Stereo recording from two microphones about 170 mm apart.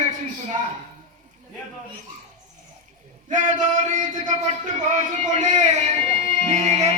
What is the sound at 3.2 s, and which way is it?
A man's voice, 50° right (ahead or behind).